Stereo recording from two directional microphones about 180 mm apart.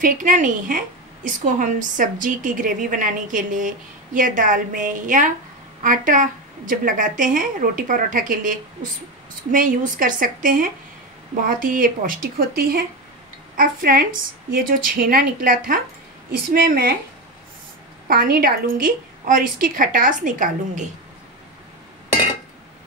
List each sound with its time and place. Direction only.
0.0 s a woman's voice: 45° right (ahead or behind)
18.0 s a woman's voice: 55° right (ahead or behind)